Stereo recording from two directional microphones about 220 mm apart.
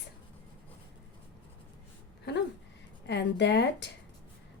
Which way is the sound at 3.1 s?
50° left (ahead or behind).